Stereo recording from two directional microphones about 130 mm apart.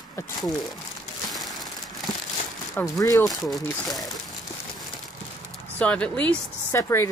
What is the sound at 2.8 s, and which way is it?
Speech, 25° left (ahead or behind).